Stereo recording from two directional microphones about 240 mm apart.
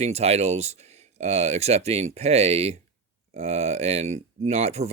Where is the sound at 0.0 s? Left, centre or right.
Right.